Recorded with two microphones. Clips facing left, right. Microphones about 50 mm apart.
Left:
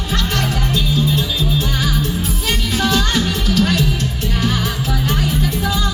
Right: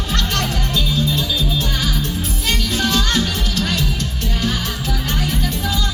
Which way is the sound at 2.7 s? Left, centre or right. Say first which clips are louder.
Left 2 dB; centre.